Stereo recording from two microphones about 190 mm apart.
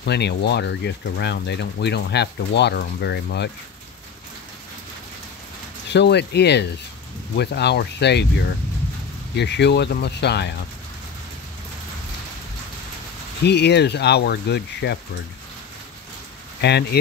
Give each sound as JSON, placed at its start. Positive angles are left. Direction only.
{"t": 0.0, "sound": "speech", "side_deg": 60}
{"t": 5.9, "sound": "speech", "side_deg": 65}
{"t": 13.4, "sound": "speech", "side_deg": 60}
{"t": 16.6, "sound": "speech", "side_deg": 60}